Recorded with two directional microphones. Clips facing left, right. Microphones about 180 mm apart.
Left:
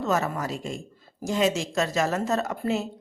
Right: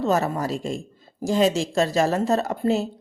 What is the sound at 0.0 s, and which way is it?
A woman's voice, 35° right (ahead or behind).